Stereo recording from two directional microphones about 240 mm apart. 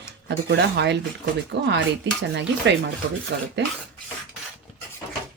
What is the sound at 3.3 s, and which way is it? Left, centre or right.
Speech, right.